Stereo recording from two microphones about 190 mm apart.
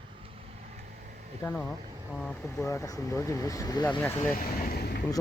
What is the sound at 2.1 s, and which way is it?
Speech, centre (ahead or behind).